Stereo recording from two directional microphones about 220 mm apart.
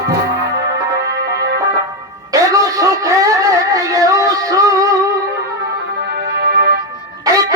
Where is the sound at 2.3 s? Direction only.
15° right (ahead or behind).